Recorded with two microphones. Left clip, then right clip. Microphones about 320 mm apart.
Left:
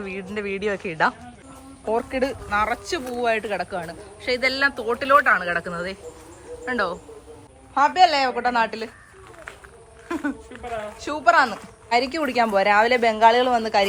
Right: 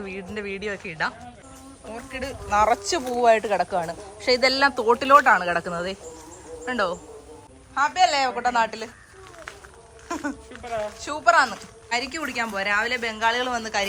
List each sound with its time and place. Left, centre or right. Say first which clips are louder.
0.0 s speech: left 3 dB; centre
2.5 s speech: right 7 dB; centre
10.1 s speech: left 2 dB; centre